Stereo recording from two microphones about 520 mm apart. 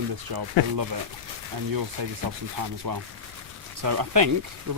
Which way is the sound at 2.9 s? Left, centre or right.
Right.